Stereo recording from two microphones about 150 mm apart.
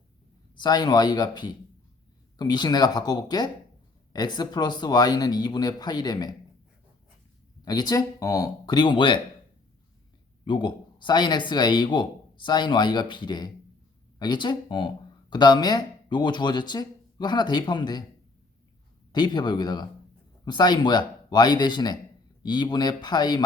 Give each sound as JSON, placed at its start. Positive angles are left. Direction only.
{"t": 0.6, "sound": "speech", "side_deg": 30}
{"t": 7.6, "sound": "speech", "side_deg": 25}
{"t": 10.4, "sound": "speech", "side_deg": 30}
{"t": 19.1, "sound": "speech", "side_deg": 30}